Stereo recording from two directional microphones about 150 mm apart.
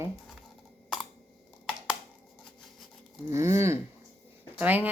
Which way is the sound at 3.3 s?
20° right (ahead or behind).